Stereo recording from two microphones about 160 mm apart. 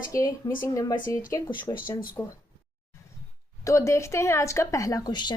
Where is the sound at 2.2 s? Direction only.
15° left (ahead or behind).